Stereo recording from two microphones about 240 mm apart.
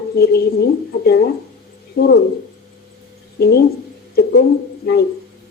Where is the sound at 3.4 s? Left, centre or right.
Left.